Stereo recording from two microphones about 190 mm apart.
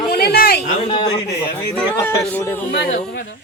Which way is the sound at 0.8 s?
25° left (ahead or behind).